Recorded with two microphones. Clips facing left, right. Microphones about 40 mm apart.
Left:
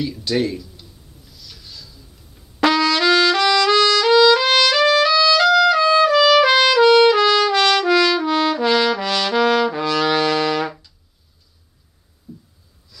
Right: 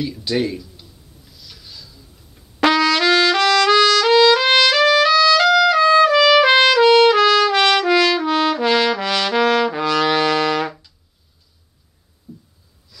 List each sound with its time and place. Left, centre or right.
0.2 s speech: centre
2.6 s trumpet: right
5.0 s music: right
7.2 s trumpet: right
12.3 s a sound: centre